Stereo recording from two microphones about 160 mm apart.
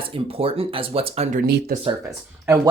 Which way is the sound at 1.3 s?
65° right (ahead or behind).